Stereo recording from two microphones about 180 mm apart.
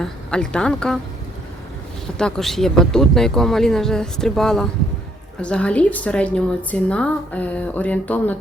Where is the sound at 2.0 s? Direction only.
Centre (ahead or behind).